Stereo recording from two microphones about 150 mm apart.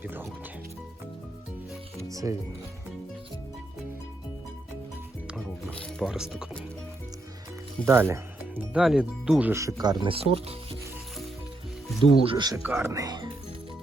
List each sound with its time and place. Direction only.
0.0 s speech: 15° right (ahead or behind)
2.0 s music: 20° right (ahead or behind)
5.3 s music: 5° right (ahead or behind)
6.0 s speech: 5° right (ahead or behind)
7.9 s speech: 15° right (ahead or behind); by 10.8 s 40° right (ahead or behind)
12.1 s speech: 40° right (ahead or behind)
12.6 s speech: 15° right (ahead or behind)